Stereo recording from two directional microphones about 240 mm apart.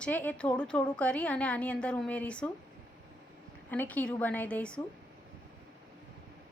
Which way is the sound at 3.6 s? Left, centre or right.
Centre.